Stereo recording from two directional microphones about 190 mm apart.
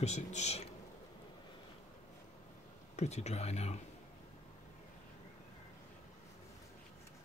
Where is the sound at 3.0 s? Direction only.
35° left (ahead or behind).